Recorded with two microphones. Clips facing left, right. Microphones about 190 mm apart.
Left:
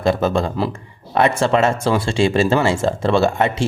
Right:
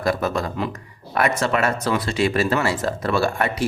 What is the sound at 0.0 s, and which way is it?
A man's voice, 25° left (ahead or behind).